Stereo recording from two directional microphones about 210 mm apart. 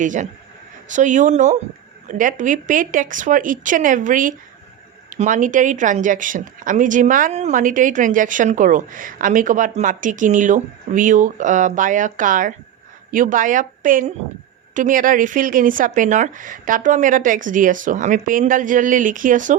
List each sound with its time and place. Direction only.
0.0 s speech: 35° right (ahead or behind)